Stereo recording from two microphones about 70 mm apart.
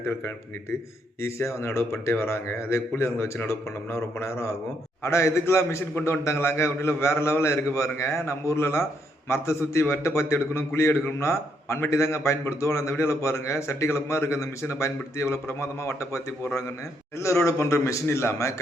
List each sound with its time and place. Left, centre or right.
1.6 s a man's voice: left